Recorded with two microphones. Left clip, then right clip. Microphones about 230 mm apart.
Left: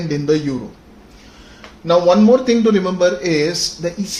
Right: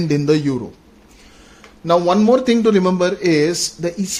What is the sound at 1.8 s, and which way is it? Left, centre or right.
Speech, right.